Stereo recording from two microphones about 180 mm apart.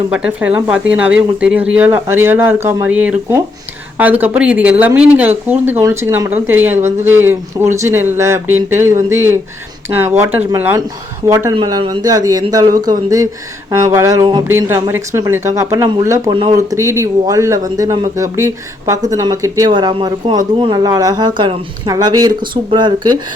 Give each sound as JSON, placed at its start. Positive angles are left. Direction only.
{"t": 0.1, "sound": "speech", "side_deg": -5}